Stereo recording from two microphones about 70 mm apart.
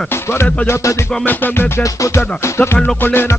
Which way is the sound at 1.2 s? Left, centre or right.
Left.